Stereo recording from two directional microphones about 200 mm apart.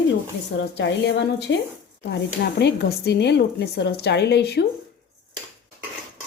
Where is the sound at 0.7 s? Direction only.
60° left (ahead or behind).